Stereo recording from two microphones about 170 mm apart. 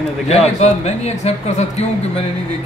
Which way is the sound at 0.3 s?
40° left (ahead or behind).